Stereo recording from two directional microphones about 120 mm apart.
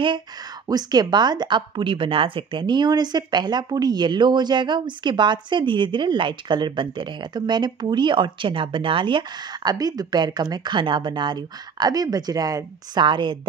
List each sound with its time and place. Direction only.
0.7 s speech: 35° right (ahead or behind)